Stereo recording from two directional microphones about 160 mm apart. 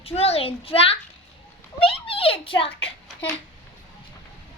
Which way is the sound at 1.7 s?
35° left (ahead or behind).